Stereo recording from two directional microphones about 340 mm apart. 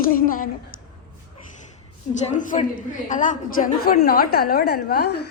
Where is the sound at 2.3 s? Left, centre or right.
Left.